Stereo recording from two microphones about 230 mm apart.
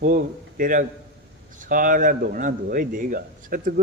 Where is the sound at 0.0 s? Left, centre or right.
Right.